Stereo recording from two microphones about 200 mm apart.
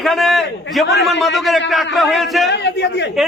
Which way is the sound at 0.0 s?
Centre (ahead or behind).